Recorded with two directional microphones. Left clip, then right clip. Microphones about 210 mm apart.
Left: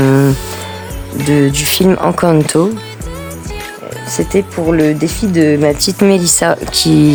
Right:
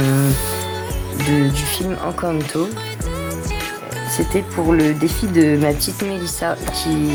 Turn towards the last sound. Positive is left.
turn(degrees=50)  # may be behind; listen again after turning